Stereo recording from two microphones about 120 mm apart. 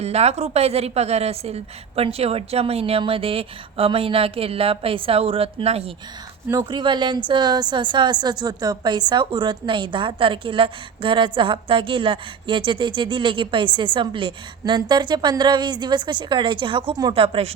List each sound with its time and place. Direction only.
0.0 s a woman's voice: 60° right (ahead or behind)
6.5 s a woman's voice: 40° right (ahead or behind)
16.9 s a woman's voice: 35° right (ahead or behind)
17.2 s speech: 50° right (ahead or behind)